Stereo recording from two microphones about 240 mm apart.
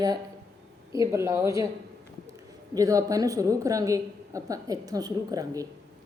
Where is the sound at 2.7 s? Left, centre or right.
Centre.